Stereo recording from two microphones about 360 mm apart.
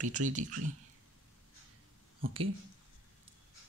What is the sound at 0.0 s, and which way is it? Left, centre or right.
Speech, right.